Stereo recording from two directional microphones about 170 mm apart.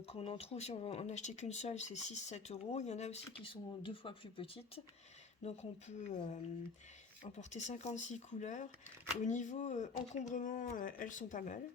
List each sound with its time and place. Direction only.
0.1 s speech: 35° left (ahead or behind)
6.1 s speech: 45° left (ahead or behind)